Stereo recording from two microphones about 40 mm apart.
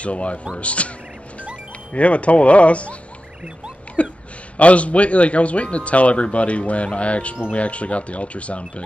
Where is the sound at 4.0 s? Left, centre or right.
Left.